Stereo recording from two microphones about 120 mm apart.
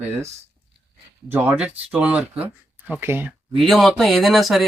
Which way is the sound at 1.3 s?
15° right (ahead or behind).